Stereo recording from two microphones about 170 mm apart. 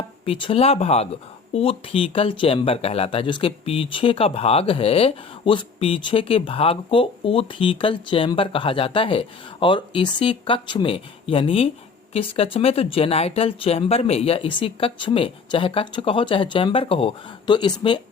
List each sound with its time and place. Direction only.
0.3 s speech: 30° left (ahead or behind)